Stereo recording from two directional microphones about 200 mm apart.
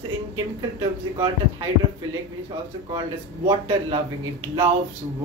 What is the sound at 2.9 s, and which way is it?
A man's voice, 25° right (ahead or behind).